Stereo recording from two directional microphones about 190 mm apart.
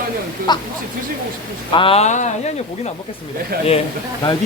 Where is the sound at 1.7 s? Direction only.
25° left (ahead or behind).